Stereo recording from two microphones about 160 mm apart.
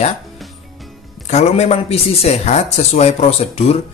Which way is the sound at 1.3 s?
40° left (ahead or behind).